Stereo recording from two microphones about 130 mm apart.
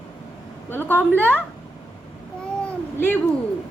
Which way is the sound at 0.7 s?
15° left (ahead or behind).